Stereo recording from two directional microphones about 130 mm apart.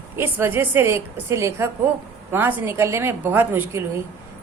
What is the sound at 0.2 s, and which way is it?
A woman's voice, 20° right (ahead or behind).